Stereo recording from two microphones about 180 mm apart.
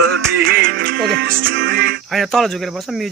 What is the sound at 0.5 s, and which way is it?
Music, 55° right (ahead or behind).